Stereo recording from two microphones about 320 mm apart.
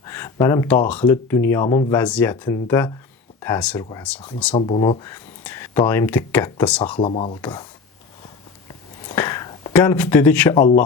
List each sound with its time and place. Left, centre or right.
0.0 s a sound: centre
0.4 s speech: centre
4.5 s speech: centre
7.0 s speech: centre
9.0 s a sound: centre
10.6 s speech: left